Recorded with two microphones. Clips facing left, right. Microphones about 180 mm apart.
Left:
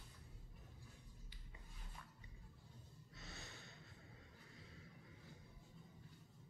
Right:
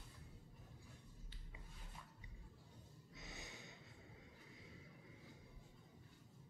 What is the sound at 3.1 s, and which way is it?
Snort, 15° right (ahead or behind).